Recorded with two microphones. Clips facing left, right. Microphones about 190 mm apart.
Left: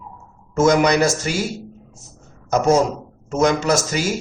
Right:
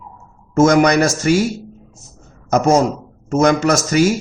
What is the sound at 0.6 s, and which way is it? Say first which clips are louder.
Speech: right 3 dB; 50° right (ahead or behind).